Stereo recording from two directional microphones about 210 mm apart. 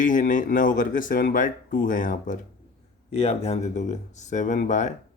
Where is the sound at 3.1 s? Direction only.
30° left (ahead or behind).